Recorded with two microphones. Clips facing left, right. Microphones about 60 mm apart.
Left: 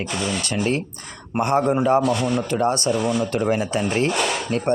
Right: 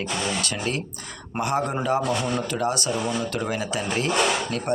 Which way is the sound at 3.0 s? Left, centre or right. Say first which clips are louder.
Left 6 dB; left.